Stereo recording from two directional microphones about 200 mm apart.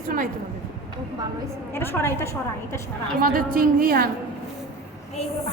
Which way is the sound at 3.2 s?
45° right (ahead or behind).